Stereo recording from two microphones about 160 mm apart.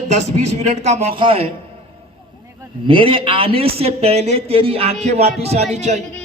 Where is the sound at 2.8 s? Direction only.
30° right (ahead or behind).